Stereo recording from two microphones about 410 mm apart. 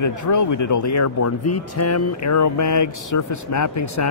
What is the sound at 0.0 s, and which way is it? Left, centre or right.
Speech, left.